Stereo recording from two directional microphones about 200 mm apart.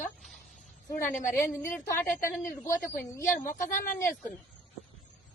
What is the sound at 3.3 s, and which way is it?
Speech, 40° left (ahead or behind).